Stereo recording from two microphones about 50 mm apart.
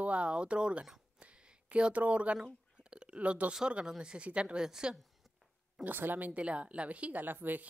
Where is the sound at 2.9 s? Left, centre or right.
Centre.